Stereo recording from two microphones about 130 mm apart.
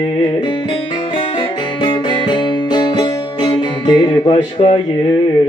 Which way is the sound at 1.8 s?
35° left (ahead or behind).